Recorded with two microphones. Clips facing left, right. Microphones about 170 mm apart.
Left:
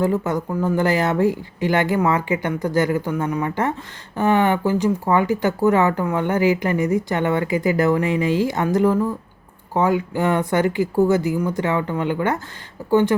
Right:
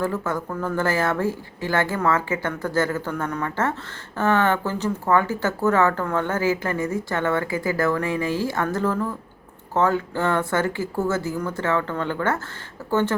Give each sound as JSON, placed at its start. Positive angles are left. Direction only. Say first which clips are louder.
{"t": 0.0, "sound": "speech", "louder": "left 5 dB", "side_deg": 20}